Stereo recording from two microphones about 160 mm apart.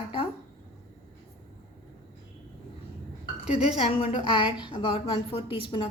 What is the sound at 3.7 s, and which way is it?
A woman's voice, 40° left (ahead or behind).